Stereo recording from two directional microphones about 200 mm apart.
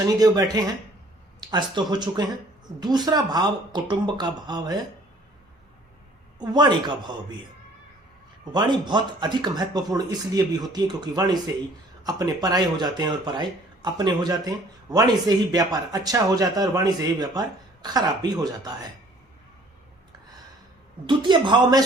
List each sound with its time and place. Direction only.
0.0 s speech: 15° right (ahead or behind)
6.4 s speech: 20° right (ahead or behind)
8.5 s speech: 20° right (ahead or behind)
21.1 s speech: 25° right (ahead or behind)